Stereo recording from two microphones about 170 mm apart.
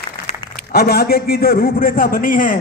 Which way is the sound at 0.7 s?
65° left (ahead or behind).